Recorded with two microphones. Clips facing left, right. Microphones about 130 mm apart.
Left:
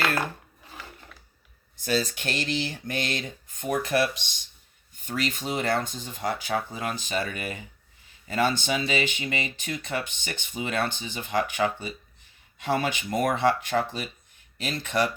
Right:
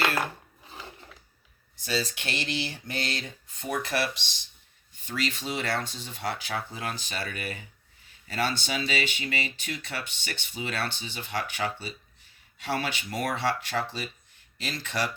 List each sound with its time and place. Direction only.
1.7 s speech: 50° left (ahead or behind)